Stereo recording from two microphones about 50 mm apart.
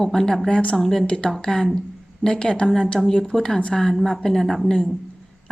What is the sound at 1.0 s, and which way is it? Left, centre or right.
A woman's voice, centre.